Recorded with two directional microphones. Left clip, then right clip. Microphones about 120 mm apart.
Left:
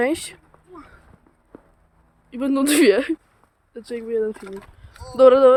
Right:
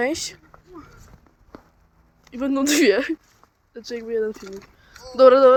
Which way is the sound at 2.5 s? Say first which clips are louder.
Left 2 dB; 55° left (ahead or behind).